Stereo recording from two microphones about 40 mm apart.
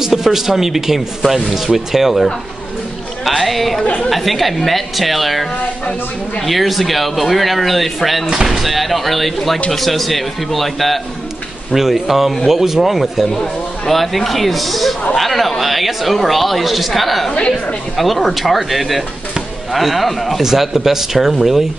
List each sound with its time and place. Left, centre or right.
0.0 s speech: centre
3.3 s speech: centre
17.3 s a woman's voice: left
17.9 s speech: centre